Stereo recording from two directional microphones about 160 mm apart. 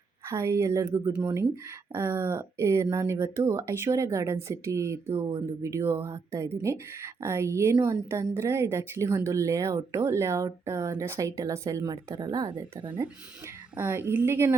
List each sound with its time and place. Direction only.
0.3 s a woman's voice: 15° right (ahead or behind)
13.7 s a woman's voice: 15° right (ahead or behind)